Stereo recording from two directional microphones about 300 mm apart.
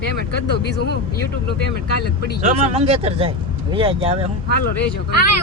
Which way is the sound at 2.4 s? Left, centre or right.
Right.